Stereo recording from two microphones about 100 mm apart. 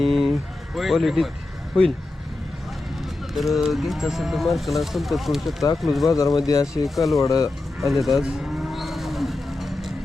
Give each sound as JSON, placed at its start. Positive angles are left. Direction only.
{"t": 0.0, "sound": "a sound", "side_deg": 0}
{"t": 3.3, "sound": "speech", "side_deg": 0}
{"t": 6.1, "sound": "speech", "side_deg": 35}
{"t": 6.8, "sound": "speech", "side_deg": 0}
{"t": 7.2, "sound": "speech", "side_deg": 35}
{"t": 7.8, "sound": "cattle", "side_deg": 0}